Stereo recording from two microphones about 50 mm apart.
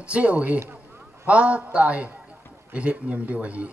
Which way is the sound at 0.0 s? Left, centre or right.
Right.